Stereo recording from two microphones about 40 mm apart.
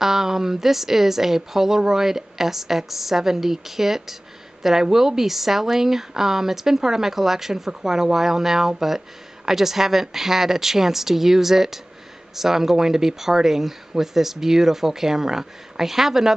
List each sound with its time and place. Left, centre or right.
0.0 s speech: centre